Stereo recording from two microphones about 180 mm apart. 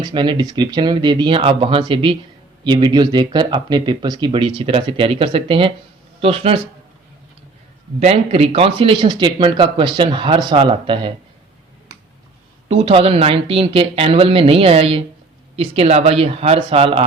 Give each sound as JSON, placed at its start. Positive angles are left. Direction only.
{"t": 0.0, "sound": "speech", "side_deg": -25}
{"t": 7.9, "sound": "speech", "side_deg": -35}
{"t": 12.6, "sound": "speech", "side_deg": -35}